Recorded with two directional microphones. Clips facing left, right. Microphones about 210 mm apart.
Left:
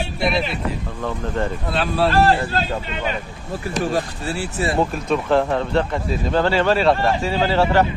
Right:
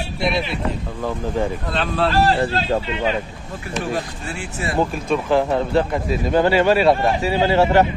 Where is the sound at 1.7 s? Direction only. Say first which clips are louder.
Left 1 dB; 5° left (ahead or behind).